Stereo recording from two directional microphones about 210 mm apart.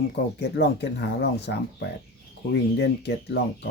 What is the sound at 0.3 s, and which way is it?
Speech, 50° left (ahead or behind).